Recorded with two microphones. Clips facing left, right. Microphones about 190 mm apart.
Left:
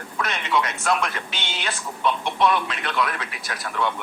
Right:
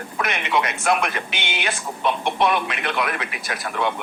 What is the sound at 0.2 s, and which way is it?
Speech, 60° right (ahead or behind).